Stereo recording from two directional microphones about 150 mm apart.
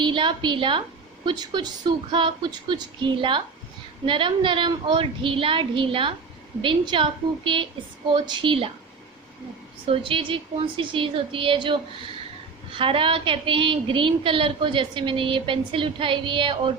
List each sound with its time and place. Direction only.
0.0 s a woman's voice: 30° right (ahead or behind)
9.8 s a woman's voice: 35° right (ahead or behind)